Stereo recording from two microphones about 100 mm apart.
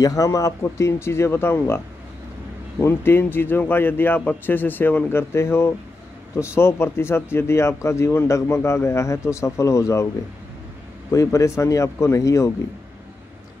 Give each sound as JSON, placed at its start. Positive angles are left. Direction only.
{"t": 0.0, "sound": "speech", "side_deg": 35}
{"t": 2.8, "sound": "speech", "side_deg": 25}
{"t": 11.1, "sound": "speech", "side_deg": 30}